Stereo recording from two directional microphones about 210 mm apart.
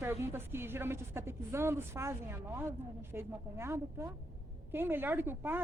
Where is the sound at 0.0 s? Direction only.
10° right (ahead or behind).